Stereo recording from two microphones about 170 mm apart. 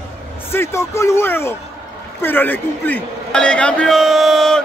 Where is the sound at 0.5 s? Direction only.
15° left (ahead or behind).